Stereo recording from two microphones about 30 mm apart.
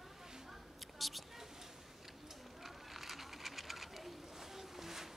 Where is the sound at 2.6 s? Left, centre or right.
Centre.